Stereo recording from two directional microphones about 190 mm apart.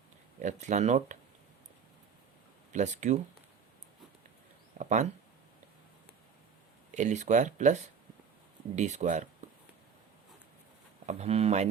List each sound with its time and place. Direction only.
0.4 s speech: 40° right (ahead or behind)
2.7 s speech: 40° right (ahead or behind)
4.8 s speech: 40° right (ahead or behind)
6.9 s speech: 40° right (ahead or behind)
11.0 s speech: 35° right (ahead or behind)